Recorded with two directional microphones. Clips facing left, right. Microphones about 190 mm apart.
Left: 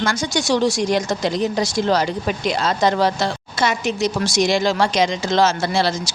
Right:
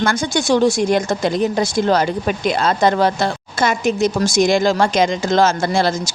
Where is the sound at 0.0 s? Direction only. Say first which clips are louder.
Right 3 dB; 55° right (ahead or behind).